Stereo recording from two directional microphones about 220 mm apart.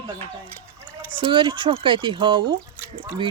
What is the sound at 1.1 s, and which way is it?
Speech, 20° right (ahead or behind).